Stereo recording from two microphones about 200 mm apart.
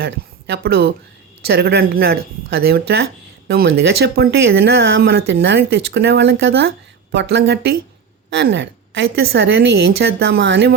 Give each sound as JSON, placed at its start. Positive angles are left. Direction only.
{"t": 0.0, "sound": "a woman's voice", "side_deg": -55}